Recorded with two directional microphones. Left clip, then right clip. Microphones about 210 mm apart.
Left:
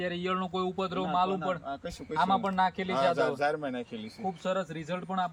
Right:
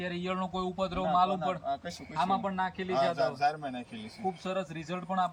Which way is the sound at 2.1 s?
20° left (ahead or behind).